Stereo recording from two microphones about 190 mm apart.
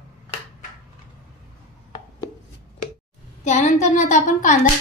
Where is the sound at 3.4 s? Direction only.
40° left (ahead or behind).